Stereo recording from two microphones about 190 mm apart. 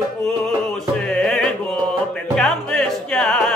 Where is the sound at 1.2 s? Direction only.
5° left (ahead or behind).